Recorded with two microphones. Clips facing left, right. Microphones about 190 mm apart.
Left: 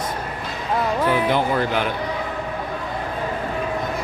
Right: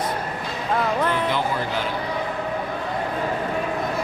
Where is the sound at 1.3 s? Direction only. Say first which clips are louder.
Left 4 dB; 60° left (ahead or behind).